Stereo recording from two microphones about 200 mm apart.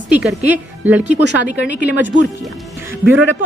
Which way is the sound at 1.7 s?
60° left (ahead or behind).